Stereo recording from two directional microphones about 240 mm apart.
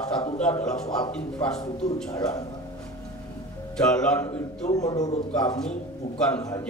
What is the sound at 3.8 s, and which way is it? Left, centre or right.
Speech, centre.